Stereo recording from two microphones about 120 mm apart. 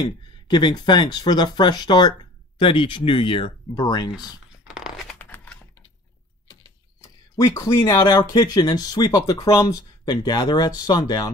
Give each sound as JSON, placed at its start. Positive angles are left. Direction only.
{"t": 0.0, "sound": "speech", "side_deg": 40}
{"t": 3.7, "sound": "speech", "side_deg": 35}
{"t": 4.6, "sound": "tearing", "side_deg": -5}
{"t": 5.2, "sound": "typewriter", "side_deg": 15}
{"t": 6.4, "sound": "a sound", "side_deg": 30}
{"t": 7.8, "sound": "speech", "side_deg": 40}